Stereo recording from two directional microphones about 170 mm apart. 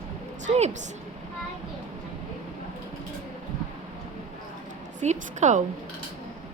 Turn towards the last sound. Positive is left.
turn(degrees=-45)  # may be behind; listen again after turning